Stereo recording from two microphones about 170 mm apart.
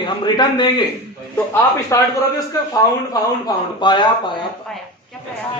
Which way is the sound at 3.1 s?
25° left (ahead or behind).